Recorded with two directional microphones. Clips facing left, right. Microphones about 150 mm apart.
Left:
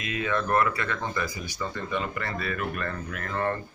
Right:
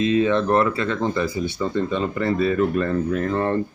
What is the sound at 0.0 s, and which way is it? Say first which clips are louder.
Speech: right 10 dB; 25° right (ahead or behind).